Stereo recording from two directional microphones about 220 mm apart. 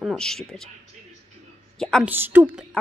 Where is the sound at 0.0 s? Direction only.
Centre (ahead or behind).